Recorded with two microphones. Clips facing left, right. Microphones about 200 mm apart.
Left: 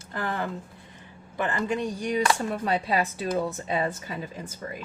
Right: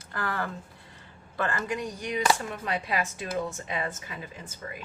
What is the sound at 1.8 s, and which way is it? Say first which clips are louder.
Speech: left 4 dB; 30° left (ahead or behind).